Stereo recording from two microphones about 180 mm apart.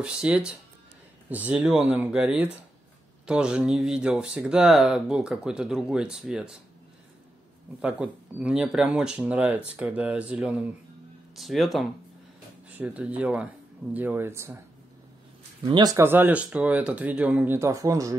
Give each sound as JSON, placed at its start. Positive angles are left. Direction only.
{"t": 0.0, "sound": "speech", "side_deg": -5}
{"t": 7.8, "sound": "speech", "side_deg": -5}
{"t": 11.3, "sound": "speech", "side_deg": 0}
{"t": 15.6, "sound": "speech", "side_deg": -20}